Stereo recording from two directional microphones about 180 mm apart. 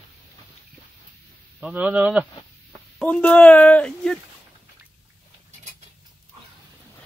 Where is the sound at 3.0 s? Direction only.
10° left (ahead or behind).